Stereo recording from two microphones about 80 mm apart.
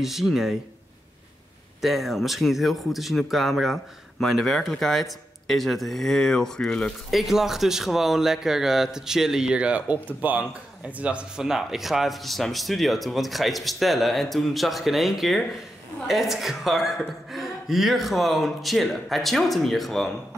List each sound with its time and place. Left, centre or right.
0.0 s speech: centre
1.8 s speech: centre